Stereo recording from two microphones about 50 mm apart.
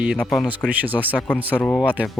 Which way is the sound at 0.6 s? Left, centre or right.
Right.